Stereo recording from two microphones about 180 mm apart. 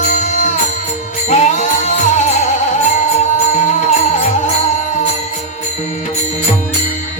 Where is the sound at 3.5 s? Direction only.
40° left (ahead or behind).